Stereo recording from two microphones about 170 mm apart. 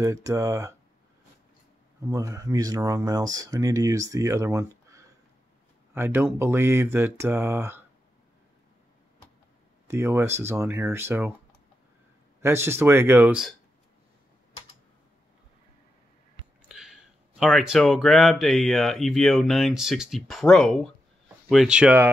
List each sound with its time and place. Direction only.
0.0 s speech: 20° right (ahead or behind)
2.0 s speech: 20° right (ahead or behind)
9.8 s speech: 15° right (ahead or behind)
12.4 s speech: 15° right (ahead or behind)
16.6 s speech: 5° right (ahead or behind)